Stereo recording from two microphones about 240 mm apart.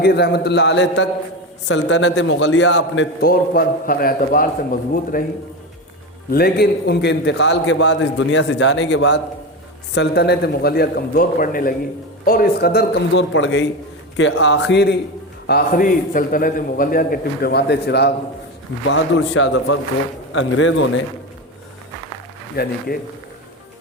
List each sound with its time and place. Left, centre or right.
0.0 s a man's voice: left
6.3 s a man's voice: left
22.6 s a man's voice: left